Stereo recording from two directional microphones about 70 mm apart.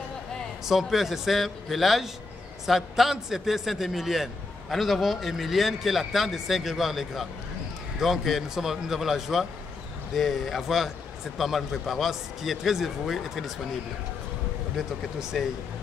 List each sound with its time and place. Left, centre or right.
0.7 s a man's voice: centre
14.8 s a man's voice: centre